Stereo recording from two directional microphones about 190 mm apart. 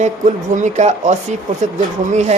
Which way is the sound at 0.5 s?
40° right (ahead or behind).